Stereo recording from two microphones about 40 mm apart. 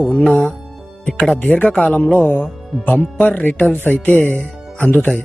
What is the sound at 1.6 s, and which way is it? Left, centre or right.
Speech, left.